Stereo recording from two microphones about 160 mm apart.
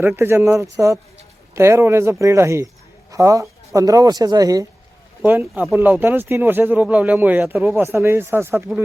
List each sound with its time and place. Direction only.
0.0 s speech: 15° right (ahead or behind)